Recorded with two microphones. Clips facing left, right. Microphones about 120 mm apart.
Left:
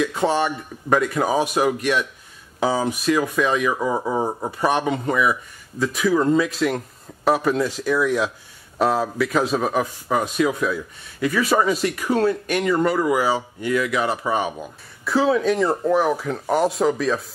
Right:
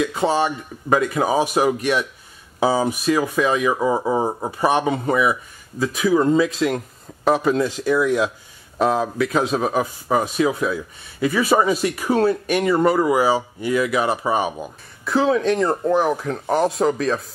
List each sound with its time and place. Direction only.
0.0 s speech: 5° right (ahead or behind)
1.5 s speech: 15° right (ahead or behind)
12.9 s speech: 20° right (ahead or behind); by 17.2 s centre (ahead or behind)